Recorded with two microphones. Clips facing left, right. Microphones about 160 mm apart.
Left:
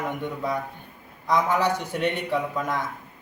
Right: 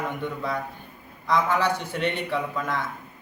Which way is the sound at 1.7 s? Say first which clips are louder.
Left 1 dB; 40° left (ahead or behind).